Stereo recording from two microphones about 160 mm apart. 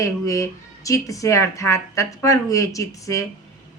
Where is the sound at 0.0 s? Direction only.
20° left (ahead or behind).